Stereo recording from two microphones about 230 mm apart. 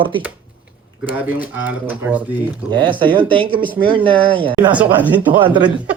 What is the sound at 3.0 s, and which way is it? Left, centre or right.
Speech, right.